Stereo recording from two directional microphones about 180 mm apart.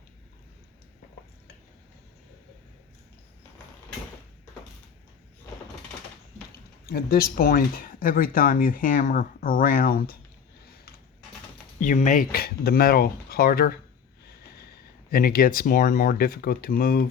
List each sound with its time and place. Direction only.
6.8 s speech: 55° left (ahead or behind)
10.7 s a sound: 55° left (ahead or behind)
11.8 s speech: 45° left (ahead or behind)
15.1 s speech: 55° left (ahead or behind)